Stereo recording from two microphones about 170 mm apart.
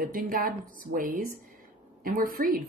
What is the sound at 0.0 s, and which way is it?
A woman's voice, 55° right (ahead or behind).